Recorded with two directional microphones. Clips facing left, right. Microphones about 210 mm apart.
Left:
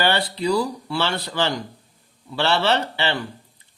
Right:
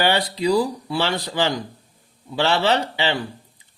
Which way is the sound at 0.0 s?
15° right (ahead or behind).